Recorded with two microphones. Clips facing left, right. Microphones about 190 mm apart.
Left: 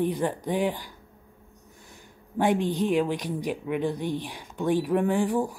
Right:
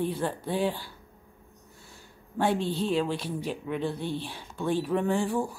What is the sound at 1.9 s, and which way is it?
Speech, 15° left (ahead or behind).